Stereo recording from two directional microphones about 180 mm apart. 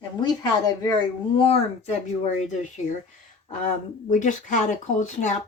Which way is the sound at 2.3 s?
40° left (ahead or behind).